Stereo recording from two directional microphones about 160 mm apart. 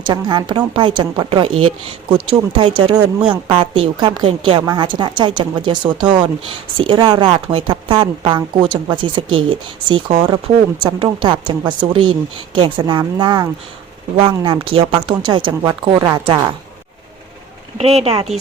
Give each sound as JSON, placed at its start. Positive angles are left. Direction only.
{"t": 0.0, "sound": "a woman's voice", "side_deg": -30}
{"t": 17.7, "sound": "a woman's voice", "side_deg": -40}